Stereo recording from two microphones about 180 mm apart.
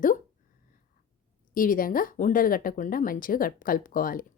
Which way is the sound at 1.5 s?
50° left (ahead or behind).